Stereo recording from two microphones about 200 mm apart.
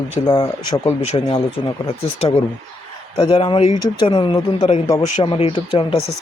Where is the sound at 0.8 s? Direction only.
30° left (ahead or behind).